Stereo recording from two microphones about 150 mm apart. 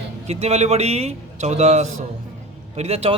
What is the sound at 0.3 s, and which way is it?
A man's voice, 45° right (ahead or behind).